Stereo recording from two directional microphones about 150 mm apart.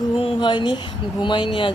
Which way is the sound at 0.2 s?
30° left (ahead or behind).